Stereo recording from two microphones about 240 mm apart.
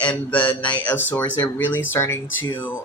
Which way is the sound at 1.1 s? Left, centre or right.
Centre.